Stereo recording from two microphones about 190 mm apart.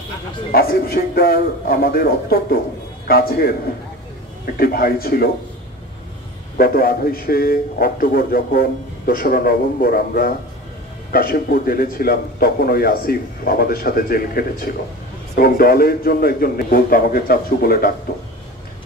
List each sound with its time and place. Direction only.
0.5 s a man's voice: 50° left (ahead or behind)
4.6 s a man's voice: 50° left (ahead or behind)
6.6 s a man's voice: 50° left (ahead or behind)